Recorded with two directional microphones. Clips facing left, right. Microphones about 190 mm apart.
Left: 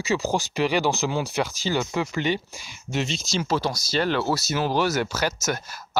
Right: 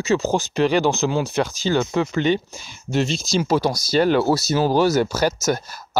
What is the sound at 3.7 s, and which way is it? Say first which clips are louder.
Speech: right 7 dB; 40° right (ahead or behind).